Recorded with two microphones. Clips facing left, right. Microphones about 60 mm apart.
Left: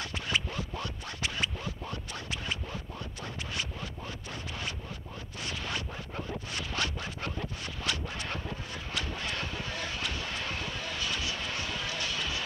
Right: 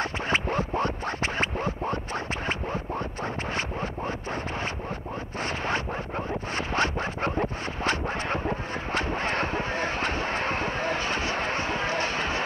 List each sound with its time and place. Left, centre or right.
0.0 s scratch: right
5.4 s scratch: right